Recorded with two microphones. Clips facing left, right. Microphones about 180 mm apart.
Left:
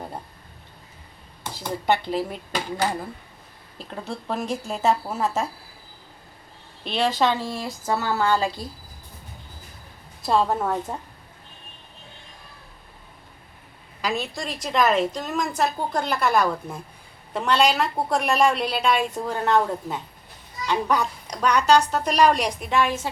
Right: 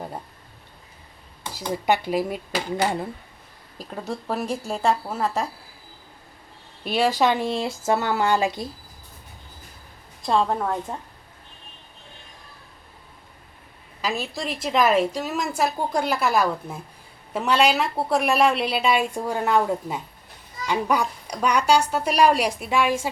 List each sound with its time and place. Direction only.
1.5 s speech: 10° right (ahead or behind)
3.8 s speech: 10° right (ahead or behind)
4.4 s a woman's voice: centre (ahead or behind)
6.8 s speech: 10° right (ahead or behind)
10.2 s a woman's voice: 5° left (ahead or behind)
14.0 s a woman's voice: 5° right (ahead or behind)